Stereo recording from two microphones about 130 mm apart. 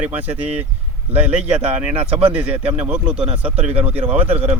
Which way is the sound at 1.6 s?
50° right (ahead or behind).